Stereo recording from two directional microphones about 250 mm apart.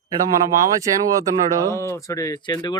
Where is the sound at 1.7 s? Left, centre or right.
Centre.